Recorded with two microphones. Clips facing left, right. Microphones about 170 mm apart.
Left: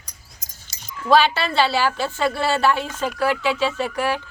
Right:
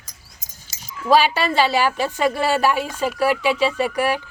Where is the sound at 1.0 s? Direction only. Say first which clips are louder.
Right 1 dB; 10° right (ahead or behind).